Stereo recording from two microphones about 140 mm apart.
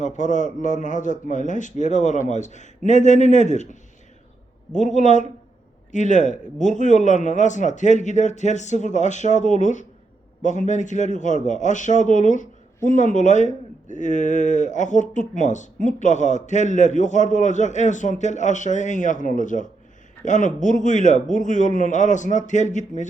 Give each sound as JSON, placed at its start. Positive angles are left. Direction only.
{"t": 0.0, "sound": "a man's voice", "side_deg": 60}